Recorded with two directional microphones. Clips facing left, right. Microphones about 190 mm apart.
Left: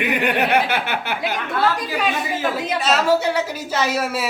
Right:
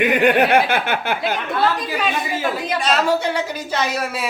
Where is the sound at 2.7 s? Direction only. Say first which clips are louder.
Left 1 dB; 5° left (ahead or behind).